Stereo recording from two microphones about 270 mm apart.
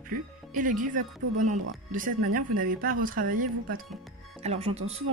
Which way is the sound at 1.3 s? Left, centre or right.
Right.